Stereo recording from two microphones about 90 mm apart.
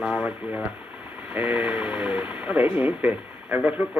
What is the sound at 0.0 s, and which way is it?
Speech, 10° right (ahead or behind).